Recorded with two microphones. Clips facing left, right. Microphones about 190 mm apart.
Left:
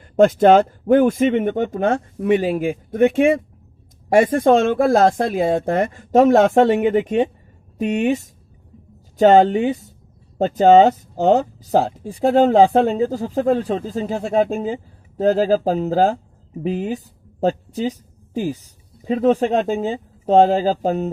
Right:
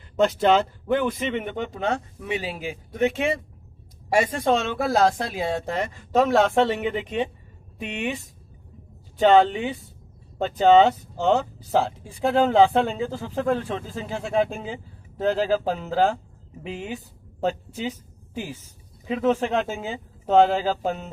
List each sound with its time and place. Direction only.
0.2 s speech: 50° left (ahead or behind)